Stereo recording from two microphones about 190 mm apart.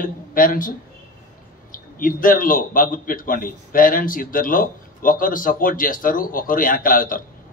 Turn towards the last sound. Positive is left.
turn(degrees=45)  # may be behind; listen again after turning